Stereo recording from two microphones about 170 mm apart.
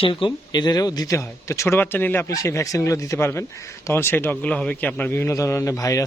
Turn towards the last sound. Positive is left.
turn(degrees=20)  # may be behind; listen again after turning